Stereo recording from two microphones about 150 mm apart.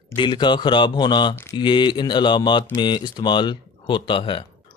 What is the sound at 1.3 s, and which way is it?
Speech, 15° left (ahead or behind).